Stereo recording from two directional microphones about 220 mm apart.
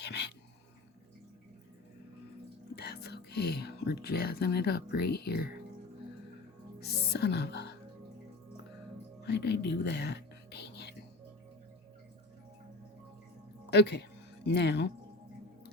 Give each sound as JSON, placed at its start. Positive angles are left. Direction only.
{"t": 0.0, "sound": "a sound", "side_deg": 50}
{"t": 2.7, "sound": "speech", "side_deg": 45}
{"t": 6.7, "sound": "music", "side_deg": 50}
{"t": 9.2, "sound": "whispering", "side_deg": 50}
{"t": 13.7, "sound": "speech", "side_deg": 50}